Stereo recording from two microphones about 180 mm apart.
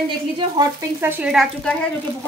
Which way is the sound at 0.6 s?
10° right (ahead or behind).